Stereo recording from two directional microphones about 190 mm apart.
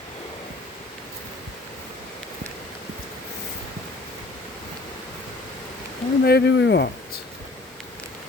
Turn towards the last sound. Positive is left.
turn(degrees=60)  # may be behind; listen again after turning